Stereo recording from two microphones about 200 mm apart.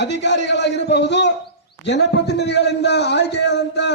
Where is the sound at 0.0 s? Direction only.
60° left (ahead or behind).